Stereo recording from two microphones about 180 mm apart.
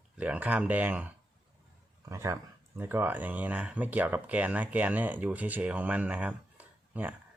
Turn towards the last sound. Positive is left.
turn(degrees=-10)  # may be behind; listen again after turning